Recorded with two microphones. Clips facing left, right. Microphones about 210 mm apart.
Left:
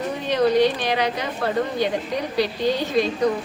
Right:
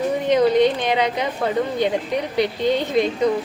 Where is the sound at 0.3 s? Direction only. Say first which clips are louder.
Right 2 dB; 20° right (ahead or behind).